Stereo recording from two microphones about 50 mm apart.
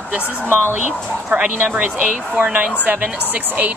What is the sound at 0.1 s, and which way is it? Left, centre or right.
A woman's voice, right.